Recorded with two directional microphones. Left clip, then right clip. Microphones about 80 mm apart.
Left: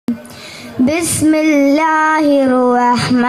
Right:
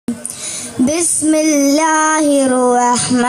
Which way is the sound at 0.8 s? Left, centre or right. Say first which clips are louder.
Left 2 dB; left.